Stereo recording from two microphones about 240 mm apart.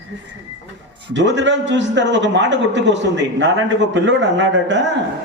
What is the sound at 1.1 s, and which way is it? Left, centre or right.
A man's voice, right.